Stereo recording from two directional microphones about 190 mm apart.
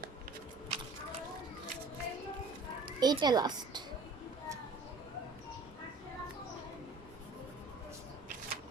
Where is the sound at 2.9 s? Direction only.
20° right (ahead or behind).